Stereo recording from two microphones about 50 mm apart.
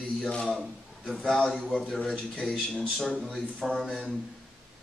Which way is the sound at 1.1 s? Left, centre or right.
Centre.